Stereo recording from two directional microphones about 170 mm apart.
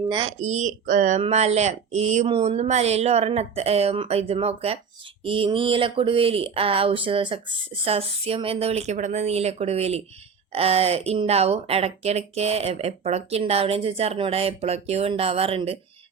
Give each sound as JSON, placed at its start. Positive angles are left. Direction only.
{"t": 0.1, "sound": "speech", "side_deg": -30}
{"t": 0.4, "sound": "speech", "side_deg": -45}